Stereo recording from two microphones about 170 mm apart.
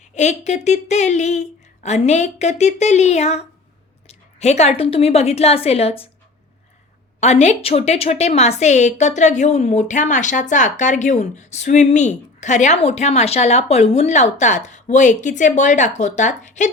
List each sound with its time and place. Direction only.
0.1 s a woman's voice: 45° left (ahead or behind)
7.2 s a woman's voice: 40° left (ahead or behind)